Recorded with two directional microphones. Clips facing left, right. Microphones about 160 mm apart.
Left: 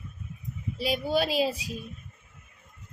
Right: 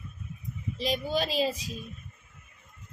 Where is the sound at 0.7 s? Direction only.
10° left (ahead or behind).